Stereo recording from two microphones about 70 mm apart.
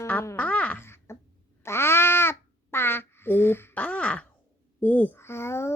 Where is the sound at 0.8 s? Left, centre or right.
Left.